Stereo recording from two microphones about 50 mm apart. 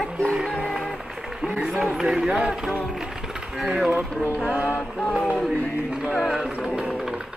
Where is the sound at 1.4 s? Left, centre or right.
Centre.